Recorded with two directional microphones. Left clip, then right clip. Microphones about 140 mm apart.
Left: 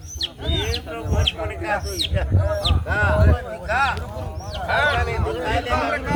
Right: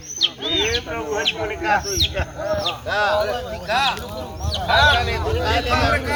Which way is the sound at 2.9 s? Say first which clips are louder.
Right 3 dB; 5° left (ahead or behind).